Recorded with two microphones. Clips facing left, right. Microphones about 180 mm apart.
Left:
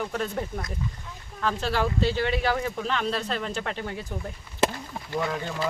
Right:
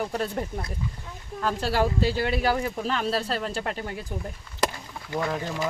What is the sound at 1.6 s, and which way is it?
Speech, 40° right (ahead or behind).